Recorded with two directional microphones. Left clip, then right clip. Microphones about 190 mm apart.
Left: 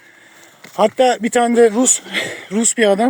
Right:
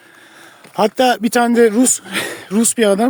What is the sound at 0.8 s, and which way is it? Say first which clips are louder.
Speech: even; 40° right (ahead or behind).